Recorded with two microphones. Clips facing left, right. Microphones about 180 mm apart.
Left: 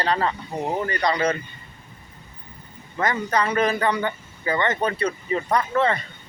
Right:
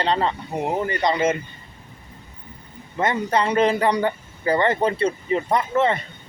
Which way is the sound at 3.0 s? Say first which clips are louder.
Right 2 dB; 25° right (ahead or behind).